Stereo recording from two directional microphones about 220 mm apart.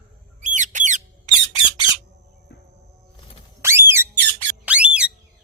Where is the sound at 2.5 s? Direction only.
50° left (ahead or behind).